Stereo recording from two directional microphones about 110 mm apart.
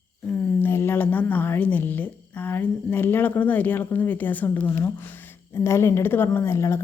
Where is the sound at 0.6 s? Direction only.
20° left (ahead or behind).